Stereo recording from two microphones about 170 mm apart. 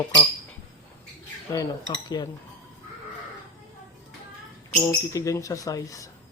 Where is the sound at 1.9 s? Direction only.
25° left (ahead or behind).